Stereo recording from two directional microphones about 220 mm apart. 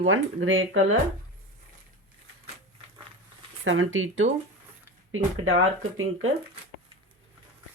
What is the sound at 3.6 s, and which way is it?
Speech, 60° right (ahead or behind).